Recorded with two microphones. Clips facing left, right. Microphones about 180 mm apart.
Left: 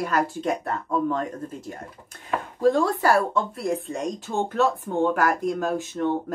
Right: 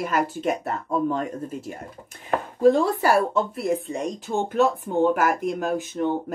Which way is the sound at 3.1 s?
Centre (ahead or behind).